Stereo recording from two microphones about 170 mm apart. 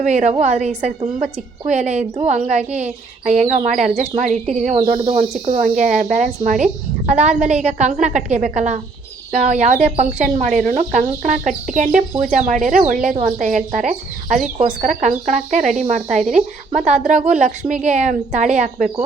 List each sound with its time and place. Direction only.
0.0 s speech: 45° right (ahead or behind)